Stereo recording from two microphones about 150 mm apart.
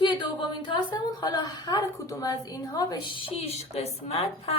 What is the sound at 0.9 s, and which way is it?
A woman's voice, 25° left (ahead or behind).